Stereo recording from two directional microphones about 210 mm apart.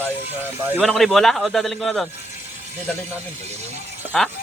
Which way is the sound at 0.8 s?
Centre (ahead or behind).